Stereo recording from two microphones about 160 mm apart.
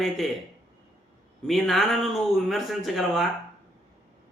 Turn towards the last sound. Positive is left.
turn(degrees=0)  # may be behind; listen again after turning